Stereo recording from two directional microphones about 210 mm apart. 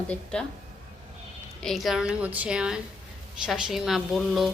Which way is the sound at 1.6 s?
Centre (ahead or behind).